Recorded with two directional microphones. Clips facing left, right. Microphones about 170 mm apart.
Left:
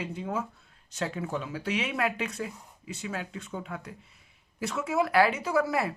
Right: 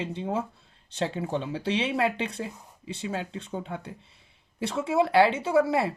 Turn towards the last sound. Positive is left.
turn(degrees=-25)  # may be behind; listen again after turning